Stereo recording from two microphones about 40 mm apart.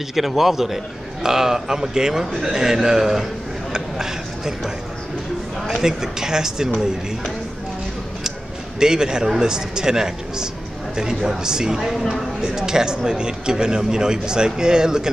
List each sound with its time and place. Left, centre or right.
0.1 s a man's voice: centre
5.8 s speech: centre
8.7 s speech: centre